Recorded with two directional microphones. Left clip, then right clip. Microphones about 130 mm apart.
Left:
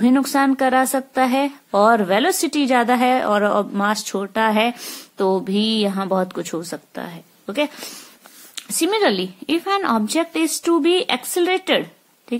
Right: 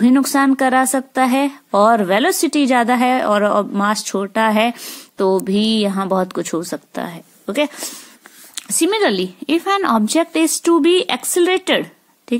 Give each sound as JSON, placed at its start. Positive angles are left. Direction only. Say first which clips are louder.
{"t": 0.0, "sound": "a woman's voice", "louder": "right 3 dB", "side_deg": -30}
{"t": 4.7, "sound": "speech", "louder": "right 1 dB", "side_deg": -10}
{"t": 5.2, "sound": "a woman's voice", "louder": "right 3 dB", "side_deg": -25}